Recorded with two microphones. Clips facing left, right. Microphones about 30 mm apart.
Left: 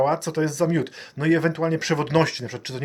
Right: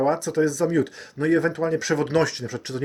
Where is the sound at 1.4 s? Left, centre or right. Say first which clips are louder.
Even; left.